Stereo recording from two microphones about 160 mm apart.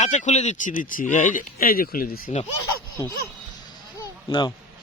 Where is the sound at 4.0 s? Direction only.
25° left (ahead or behind).